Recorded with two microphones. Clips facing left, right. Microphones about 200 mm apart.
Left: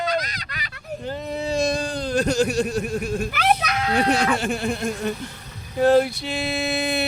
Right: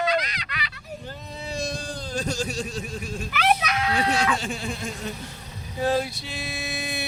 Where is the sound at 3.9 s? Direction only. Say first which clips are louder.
Left 6 dB; 60° left (ahead or behind).